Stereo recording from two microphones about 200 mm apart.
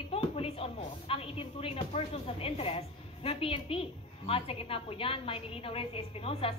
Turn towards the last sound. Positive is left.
turn(degrees=30)  # may be behind; listen again after turning